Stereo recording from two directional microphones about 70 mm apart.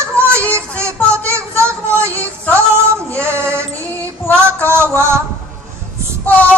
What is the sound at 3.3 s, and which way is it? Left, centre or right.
Music, right.